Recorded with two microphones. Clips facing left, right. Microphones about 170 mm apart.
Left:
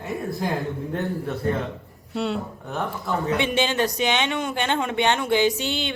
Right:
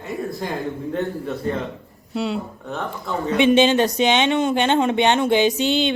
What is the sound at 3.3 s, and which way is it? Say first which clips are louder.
Speech: right 10 dB; 20° right (ahead or behind).